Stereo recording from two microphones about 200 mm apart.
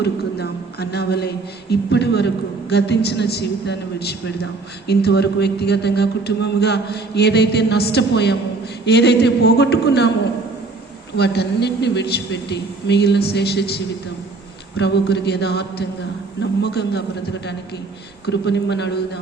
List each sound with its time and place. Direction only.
0.0 s a man's voice: 55° left (ahead or behind)
11.2 s a man's voice: 55° left (ahead or behind)
18.3 s a man's voice: 60° left (ahead or behind)